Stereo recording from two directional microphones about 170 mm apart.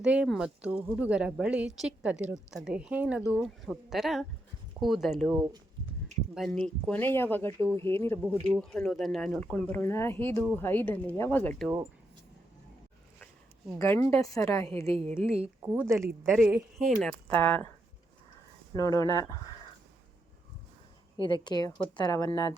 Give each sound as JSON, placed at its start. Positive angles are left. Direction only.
{"t": 0.0, "sound": "a woman's voice", "side_deg": -5}
{"t": 8.4, "sound": "a woman's voice", "side_deg": 0}
{"t": 13.7, "sound": "speech", "side_deg": 15}
{"t": 15.6, "sound": "a woman's voice", "side_deg": -10}
{"t": 16.8, "sound": "speech", "side_deg": 5}
{"t": 18.7, "sound": "speech", "side_deg": 20}
{"t": 21.2, "sound": "speech", "side_deg": 30}